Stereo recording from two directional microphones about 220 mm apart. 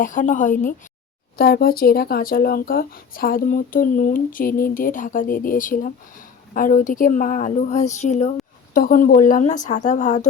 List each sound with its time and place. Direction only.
0.0 s speech: 35° left (ahead or behind)
1.4 s speech: 45° left (ahead or behind)